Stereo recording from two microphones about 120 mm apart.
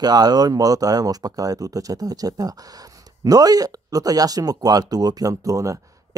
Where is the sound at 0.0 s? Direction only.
35° right (ahead or behind).